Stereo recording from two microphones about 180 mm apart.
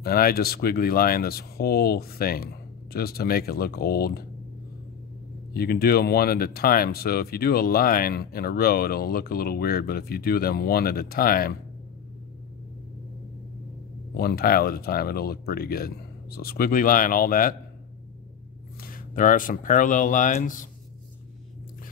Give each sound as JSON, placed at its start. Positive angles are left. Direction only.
{"t": 0.0, "sound": "speech", "side_deg": 55}
{"t": 5.5, "sound": "speech", "side_deg": 60}
{"t": 14.1, "sound": "speech", "side_deg": 60}
{"t": 18.8, "sound": "speech", "side_deg": 50}